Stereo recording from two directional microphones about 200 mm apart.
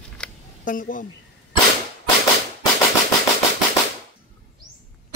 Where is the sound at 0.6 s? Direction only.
40° left (ahead or behind).